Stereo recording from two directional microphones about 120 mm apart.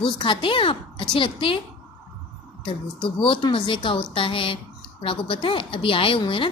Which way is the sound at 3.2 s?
45° left (ahead or behind).